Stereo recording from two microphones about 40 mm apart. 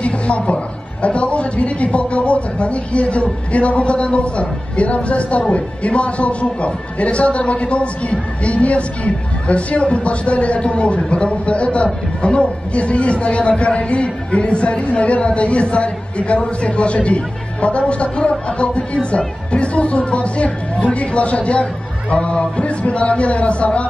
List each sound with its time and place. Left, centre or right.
1.0 s a man's voice: left